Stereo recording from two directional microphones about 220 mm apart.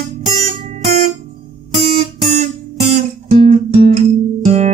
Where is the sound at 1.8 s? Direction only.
30° right (ahead or behind).